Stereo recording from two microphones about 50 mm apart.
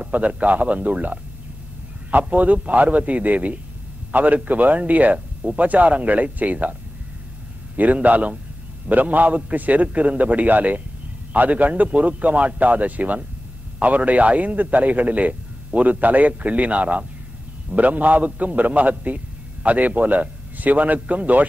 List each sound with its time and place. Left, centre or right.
0.0 s a man's voice: right